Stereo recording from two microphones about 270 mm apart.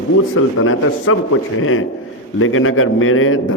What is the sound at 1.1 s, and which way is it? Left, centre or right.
A man's voice, left.